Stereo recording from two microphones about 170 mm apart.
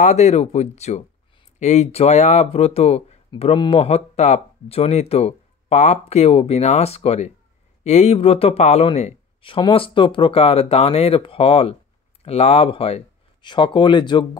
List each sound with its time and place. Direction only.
0.0 s speech: 40° left (ahead or behind); by 14.4 s 25° left (ahead or behind)